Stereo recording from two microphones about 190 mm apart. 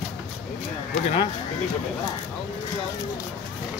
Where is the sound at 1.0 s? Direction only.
30° left (ahead or behind).